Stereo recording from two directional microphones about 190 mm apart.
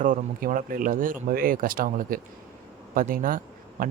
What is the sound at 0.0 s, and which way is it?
Speech, 45° right (ahead or behind).